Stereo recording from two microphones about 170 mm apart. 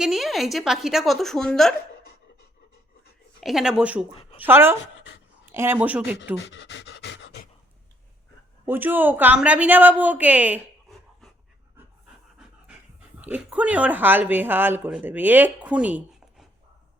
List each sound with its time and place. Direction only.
0.0 s a woman's voice: centre (ahead or behind)
3.4 s a woman's voice: 5° right (ahead or behind)
4.1 s speech: 35° left (ahead or behind)
4.4 s a woman's voice: 15° right (ahead or behind)
4.9 s dog: 90° left
5.5 s a woman's voice: 15° right (ahead or behind)
6.5 s pant: 90° left
8.6 s a woman's voice: 10° right (ahead or behind)
13.2 s a woman's voice: 10° right (ahead or behind)